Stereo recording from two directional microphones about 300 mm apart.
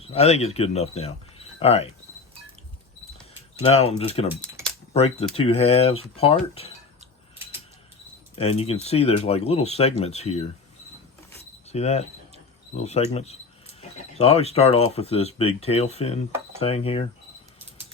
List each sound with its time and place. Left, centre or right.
0.0 s speech: centre
3.6 s speech: centre
4.3 s camera: centre
4.9 s speech: left
8.4 s speech: centre
11.7 s speech: left